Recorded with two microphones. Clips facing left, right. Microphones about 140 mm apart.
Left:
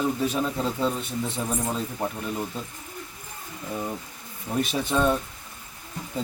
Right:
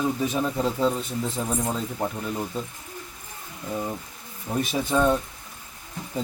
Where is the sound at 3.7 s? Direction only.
5° right (ahead or behind).